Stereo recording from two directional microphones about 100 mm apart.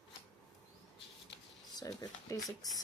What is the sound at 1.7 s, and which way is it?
Speech, 40° left (ahead or behind).